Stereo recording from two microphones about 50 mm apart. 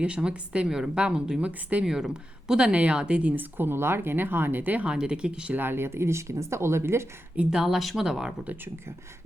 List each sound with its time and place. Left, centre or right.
0.0 s a woman's voice: right
1.8 s speech: centre
2.7 s a woman's voice: right
3.3 s speech: right
4.9 s a woman's voice: centre
5.5 s speech: right
7.5 s speech: centre